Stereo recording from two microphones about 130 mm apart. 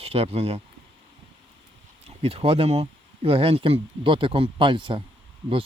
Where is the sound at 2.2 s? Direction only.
45° right (ahead or behind).